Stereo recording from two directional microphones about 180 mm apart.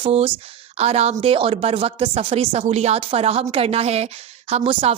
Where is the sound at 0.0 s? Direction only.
35° right (ahead or behind).